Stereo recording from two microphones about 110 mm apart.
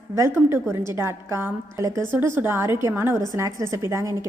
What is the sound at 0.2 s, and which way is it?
A woman's voice, 20° right (ahead or behind).